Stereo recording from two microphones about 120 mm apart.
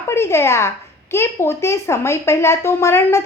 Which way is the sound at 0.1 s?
20° left (ahead or behind).